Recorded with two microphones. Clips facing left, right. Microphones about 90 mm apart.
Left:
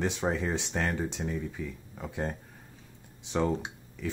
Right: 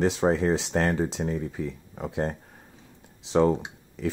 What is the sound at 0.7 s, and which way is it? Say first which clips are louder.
Speech: right 5 dB; 45° right (ahead or behind).